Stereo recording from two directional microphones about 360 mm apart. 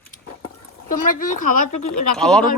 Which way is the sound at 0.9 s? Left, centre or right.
Left.